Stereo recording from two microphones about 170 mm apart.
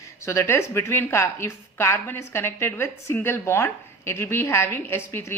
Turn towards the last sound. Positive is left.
turn(degrees=15)  # may be behind; listen again after turning